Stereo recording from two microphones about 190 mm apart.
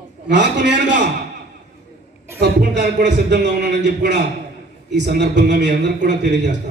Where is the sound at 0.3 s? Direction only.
65° right (ahead or behind).